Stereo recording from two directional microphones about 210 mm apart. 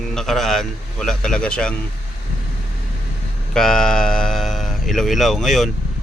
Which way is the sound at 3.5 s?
5° left (ahead or behind).